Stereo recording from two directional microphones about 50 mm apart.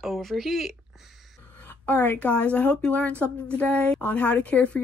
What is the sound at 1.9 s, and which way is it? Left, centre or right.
Speech, left.